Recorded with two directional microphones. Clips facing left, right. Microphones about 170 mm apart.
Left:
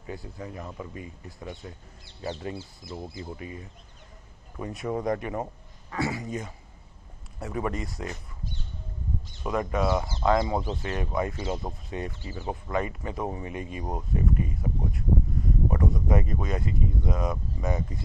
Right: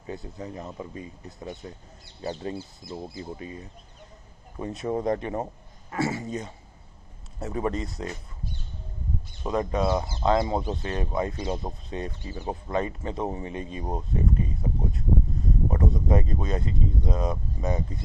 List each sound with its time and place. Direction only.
0.0 s speech: 20° right (ahead or behind)
2.9 s speech: 30° right (ahead or behind)
9.4 s speech: 25° right (ahead or behind)